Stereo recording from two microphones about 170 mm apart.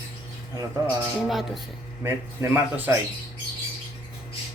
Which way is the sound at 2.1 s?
10° right (ahead or behind).